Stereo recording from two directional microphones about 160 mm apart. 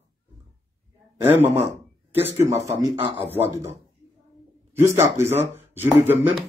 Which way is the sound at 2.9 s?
35° right (ahead or behind).